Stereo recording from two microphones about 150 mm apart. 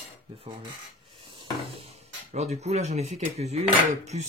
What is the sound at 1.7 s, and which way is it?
Speech, 40° right (ahead or behind).